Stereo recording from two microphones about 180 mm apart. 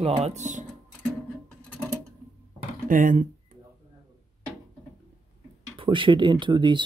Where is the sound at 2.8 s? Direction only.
50° right (ahead or behind).